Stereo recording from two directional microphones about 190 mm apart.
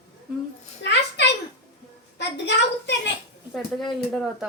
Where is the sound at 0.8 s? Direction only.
65° left (ahead or behind).